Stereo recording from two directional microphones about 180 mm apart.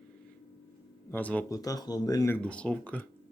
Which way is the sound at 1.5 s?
20° left (ahead or behind).